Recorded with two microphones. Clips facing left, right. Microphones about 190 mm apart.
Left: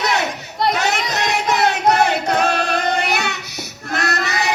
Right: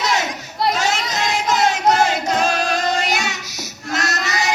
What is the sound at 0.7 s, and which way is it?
Child singing, 65° left (ahead or behind).